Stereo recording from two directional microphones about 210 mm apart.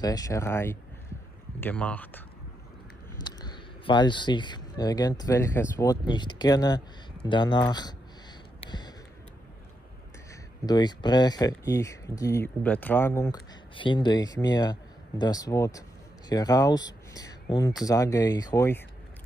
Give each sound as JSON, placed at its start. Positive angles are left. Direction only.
{"t": 0.0, "sound": "speech", "side_deg": 15}
{"t": 3.2, "sound": "speech", "side_deg": 20}
{"t": 8.6, "sound": "a sound", "side_deg": 20}
{"t": 10.6, "sound": "speech", "side_deg": 20}